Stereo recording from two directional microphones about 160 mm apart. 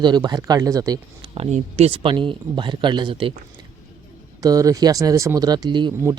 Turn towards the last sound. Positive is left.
turn(degrees=-30)  # may be behind; listen again after turning